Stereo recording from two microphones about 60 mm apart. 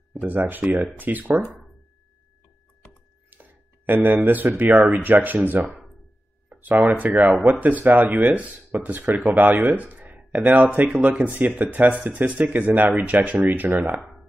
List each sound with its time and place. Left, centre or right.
0.2 s speech: right
1.4 s speech: centre
3.3 s a sound: right
4.6 s speech: right